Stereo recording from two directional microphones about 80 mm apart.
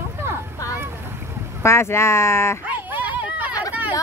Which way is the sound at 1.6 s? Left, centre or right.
Left.